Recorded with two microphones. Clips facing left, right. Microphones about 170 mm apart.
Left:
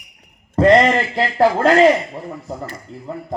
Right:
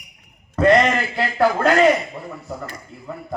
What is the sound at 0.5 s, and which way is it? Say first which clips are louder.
A man's voice: left 3 dB; 30° left (ahead or behind).